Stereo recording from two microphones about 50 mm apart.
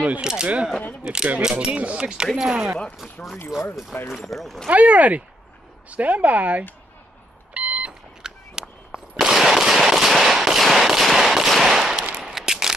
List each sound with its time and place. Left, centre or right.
0.2 s speech: centre
1.5 s speech: right
2.3 s speech: centre
4.2 s speech: centre
4.6 s speech: right
7.5 s beep: right
8.2 s gunshot: centre
12.4 s a sound: centre